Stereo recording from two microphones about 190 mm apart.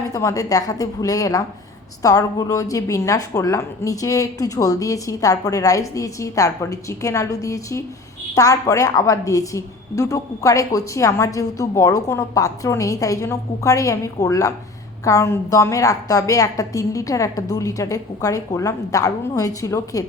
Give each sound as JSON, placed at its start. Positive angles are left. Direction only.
{"t": 0.1, "sound": "a woman's voice", "side_deg": 15}